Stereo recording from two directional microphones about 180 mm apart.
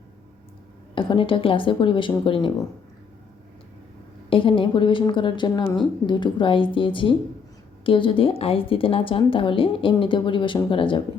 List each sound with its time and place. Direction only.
0.9 s a woman's voice: 30° left (ahead or behind)
4.3 s a woman's voice: 30° left (ahead or behind)